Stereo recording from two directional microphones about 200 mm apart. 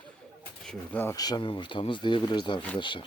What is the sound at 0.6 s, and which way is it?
Speech, 5° left (ahead or behind).